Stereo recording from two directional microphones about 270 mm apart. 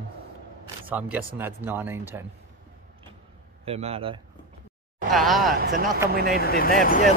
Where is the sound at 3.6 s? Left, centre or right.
Right.